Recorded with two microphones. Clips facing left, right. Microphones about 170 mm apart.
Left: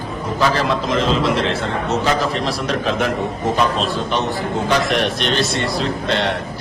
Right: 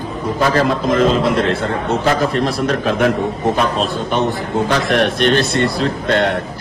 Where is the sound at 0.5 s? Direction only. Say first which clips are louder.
Right 4 dB; 50° right (ahead or behind).